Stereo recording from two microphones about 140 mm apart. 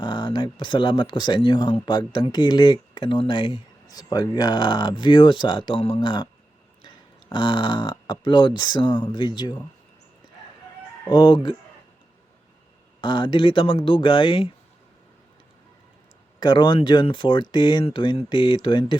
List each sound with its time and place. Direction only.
0.0 s speech: 35° left (ahead or behind)
11.1 s speech: 35° left (ahead or behind)
13.0 s speech: 35° left (ahead or behind)
16.4 s speech: 35° left (ahead or behind)